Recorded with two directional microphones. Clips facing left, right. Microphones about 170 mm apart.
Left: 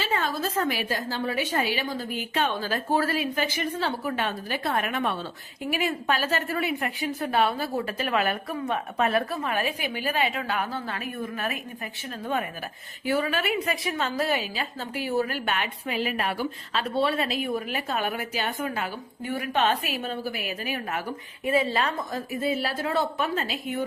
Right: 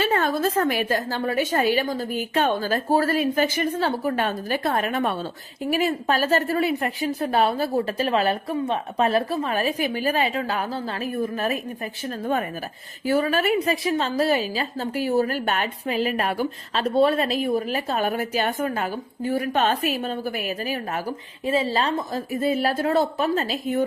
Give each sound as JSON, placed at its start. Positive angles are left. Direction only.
{"t": 0.0, "sound": "a woman's voice", "side_deg": -50}
{"t": 21.4, "sound": "a woman's voice", "side_deg": -30}
{"t": 22.3, "sound": "a woman's voice", "side_deg": -45}